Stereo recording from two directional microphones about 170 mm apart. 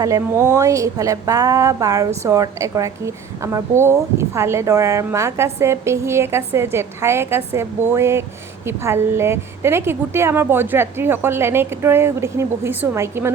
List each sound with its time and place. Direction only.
0.0 s a woman's voice: 20° right (ahead or behind)